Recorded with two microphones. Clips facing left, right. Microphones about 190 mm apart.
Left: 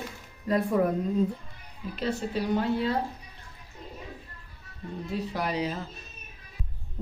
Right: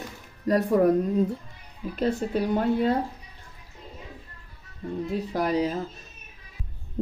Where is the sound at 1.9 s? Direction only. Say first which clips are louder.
Right 4 dB; 50° right (ahead or behind).